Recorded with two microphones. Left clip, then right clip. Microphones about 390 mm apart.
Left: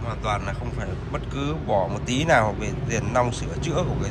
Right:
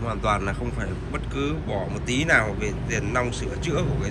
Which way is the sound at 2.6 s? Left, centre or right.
Left.